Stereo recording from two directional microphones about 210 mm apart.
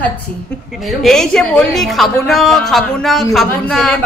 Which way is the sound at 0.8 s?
Centre (ahead or behind).